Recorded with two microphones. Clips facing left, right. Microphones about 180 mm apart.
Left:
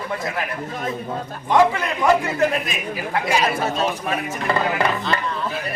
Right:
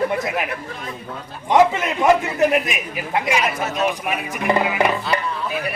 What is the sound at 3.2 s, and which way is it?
Speech, 30° left (ahead or behind).